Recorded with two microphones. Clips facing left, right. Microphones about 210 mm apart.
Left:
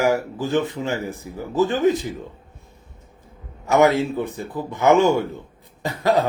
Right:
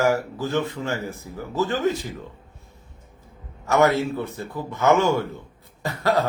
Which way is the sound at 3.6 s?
15° left (ahead or behind).